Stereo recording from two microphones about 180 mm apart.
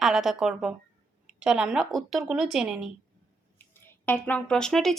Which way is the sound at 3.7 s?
10° left (ahead or behind).